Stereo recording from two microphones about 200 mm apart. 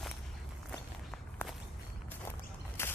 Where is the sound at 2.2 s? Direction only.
10° left (ahead or behind).